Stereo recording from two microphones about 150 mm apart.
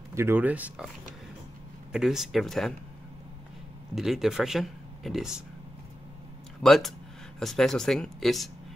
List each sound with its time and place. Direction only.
0.1 s speech: 15° right (ahead or behind)
1.9 s speech: 5° right (ahead or behind)
3.9 s speech: centre (ahead or behind)
6.6 s speech: centre (ahead or behind)